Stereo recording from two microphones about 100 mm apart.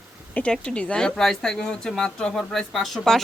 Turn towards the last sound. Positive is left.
turn(degrees=0)  # may be behind; listen again after turning